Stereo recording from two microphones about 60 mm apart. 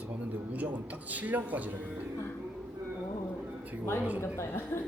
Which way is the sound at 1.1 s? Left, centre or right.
Right.